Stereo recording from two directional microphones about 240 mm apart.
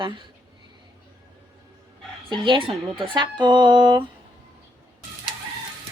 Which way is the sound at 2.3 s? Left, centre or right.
Right.